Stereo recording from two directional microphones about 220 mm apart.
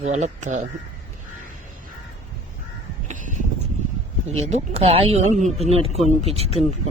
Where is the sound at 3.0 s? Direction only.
35° right (ahead or behind).